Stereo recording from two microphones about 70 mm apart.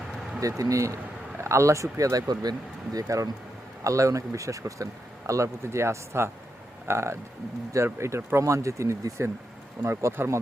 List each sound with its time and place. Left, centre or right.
0.3 s speech: right